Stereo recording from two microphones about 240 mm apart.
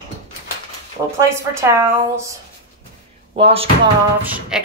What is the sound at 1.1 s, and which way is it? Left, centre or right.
Speech, centre.